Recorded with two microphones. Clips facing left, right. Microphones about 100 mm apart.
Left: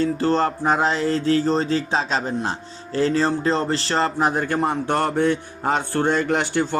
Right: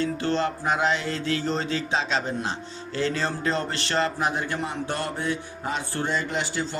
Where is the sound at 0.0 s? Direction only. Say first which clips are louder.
Left 5 dB; 40° left (ahead or behind).